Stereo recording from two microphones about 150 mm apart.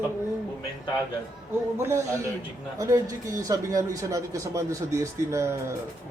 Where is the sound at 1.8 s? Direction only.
20° right (ahead or behind).